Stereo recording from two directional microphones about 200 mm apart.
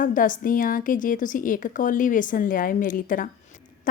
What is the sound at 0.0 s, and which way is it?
A woman's voice, 40° left (ahead or behind).